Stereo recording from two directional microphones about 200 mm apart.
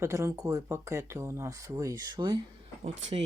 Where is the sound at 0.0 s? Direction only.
15° right (ahead or behind).